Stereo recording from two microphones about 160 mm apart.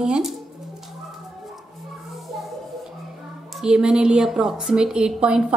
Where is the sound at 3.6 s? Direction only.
5° right (ahead or behind).